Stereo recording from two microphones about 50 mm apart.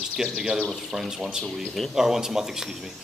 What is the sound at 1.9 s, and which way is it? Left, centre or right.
Speech, centre.